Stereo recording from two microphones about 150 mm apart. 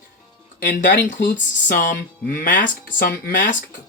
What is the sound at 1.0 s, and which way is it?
Speech, 60° left (ahead or behind).